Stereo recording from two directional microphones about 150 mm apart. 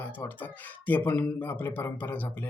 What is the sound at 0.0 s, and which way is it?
Speech, 10° left (ahead or behind).